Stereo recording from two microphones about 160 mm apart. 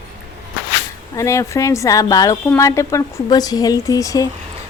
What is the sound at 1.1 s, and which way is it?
Speech, 20° left (ahead or behind).